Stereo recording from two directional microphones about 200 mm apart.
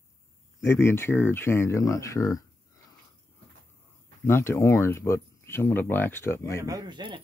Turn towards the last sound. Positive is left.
turn(degrees=-25)  # may be behind; listen again after turning